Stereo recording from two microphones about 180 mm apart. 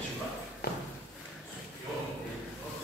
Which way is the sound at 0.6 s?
60° left (ahead or behind).